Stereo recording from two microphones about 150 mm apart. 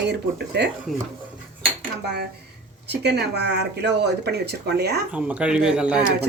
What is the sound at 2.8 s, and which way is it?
Speech, 90° right.